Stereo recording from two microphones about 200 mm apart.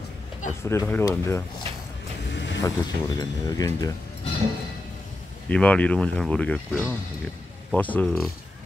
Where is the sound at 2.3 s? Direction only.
60° left (ahead or behind).